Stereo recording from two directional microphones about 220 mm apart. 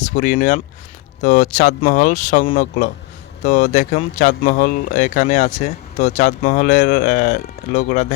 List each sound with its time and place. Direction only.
0.0 s speech: 35° left (ahead or behind)